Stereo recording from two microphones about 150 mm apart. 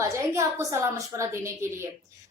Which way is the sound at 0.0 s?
20° right (ahead or behind).